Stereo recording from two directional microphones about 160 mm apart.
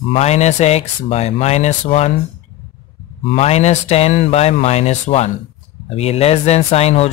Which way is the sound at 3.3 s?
40° left (ahead or behind).